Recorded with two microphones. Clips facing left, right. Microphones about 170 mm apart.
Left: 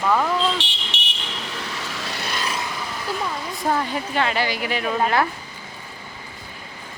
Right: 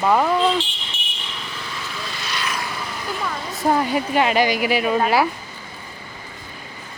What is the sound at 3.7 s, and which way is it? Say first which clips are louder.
Speech: right 5 dB; 15° right (ahead or behind).